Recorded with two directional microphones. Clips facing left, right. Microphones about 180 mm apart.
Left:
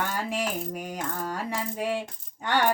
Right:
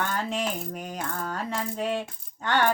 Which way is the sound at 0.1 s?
10° left (ahead or behind).